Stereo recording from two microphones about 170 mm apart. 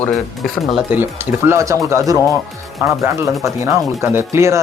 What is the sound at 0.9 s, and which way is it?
Speech, 10° right (ahead or behind).